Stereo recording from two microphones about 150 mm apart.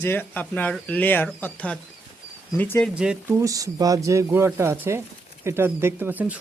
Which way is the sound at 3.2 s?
20° right (ahead or behind).